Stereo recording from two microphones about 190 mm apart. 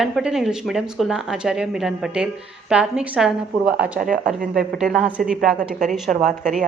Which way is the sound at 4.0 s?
45° right (ahead or behind).